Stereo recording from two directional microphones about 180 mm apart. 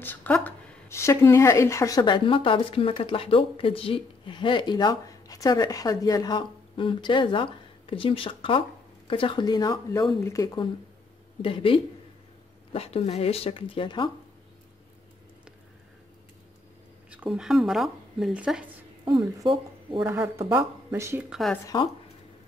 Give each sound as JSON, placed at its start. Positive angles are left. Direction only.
{"t": 0.0, "sound": "speech", "side_deg": 10}
{"t": 17.1, "sound": "speech", "side_deg": -5}
{"t": 19.4, "sound": "speech", "side_deg": -30}
{"t": 20.1, "sound": "speech", "side_deg": -10}
{"t": 21.3, "sound": "speech", "side_deg": 0}